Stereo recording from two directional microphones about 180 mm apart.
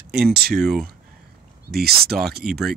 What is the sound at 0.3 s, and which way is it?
Speech, 60° right (ahead or behind).